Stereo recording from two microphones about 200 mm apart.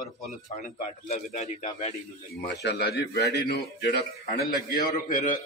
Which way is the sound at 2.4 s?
55° left (ahead or behind).